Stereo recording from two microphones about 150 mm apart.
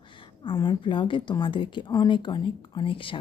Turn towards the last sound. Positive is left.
turn(degrees=35)  # may be behind; listen again after turning